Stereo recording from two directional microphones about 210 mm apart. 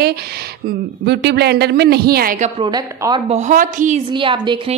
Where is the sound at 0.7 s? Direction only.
50° right (ahead or behind).